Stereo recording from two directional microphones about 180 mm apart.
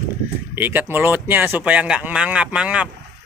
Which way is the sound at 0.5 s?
10° right (ahead or behind).